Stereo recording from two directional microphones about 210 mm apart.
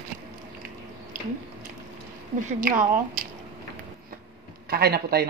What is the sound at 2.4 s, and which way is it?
Speech, 40° right (ahead or behind).